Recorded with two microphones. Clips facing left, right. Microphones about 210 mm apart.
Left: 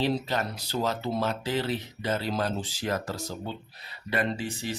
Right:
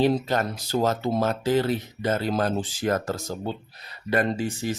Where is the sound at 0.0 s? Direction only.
50° right (ahead or behind).